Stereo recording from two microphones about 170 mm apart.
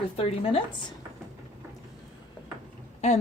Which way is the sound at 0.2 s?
35° left (ahead or behind).